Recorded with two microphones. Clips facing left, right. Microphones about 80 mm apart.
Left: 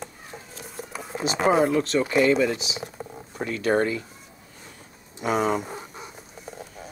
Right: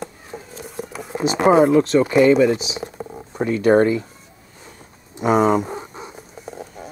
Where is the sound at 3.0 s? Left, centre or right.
Centre.